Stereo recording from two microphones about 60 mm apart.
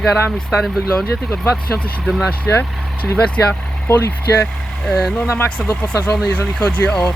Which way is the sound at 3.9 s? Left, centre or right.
Left.